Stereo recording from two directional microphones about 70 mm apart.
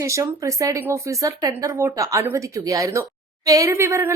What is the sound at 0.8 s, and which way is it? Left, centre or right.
Speech, right.